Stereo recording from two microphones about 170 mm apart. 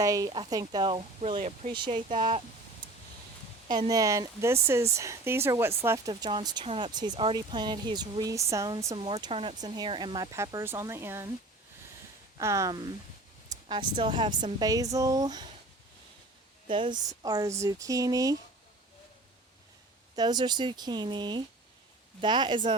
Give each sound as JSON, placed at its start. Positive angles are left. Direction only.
{"t": 0.0, "sound": "speech", "side_deg": -20}
{"t": 3.7, "sound": "speech", "side_deg": -25}
{"t": 12.4, "sound": "speech", "side_deg": -20}
{"t": 16.6, "sound": "speech", "side_deg": -30}
{"t": 20.1, "sound": "speech", "side_deg": -25}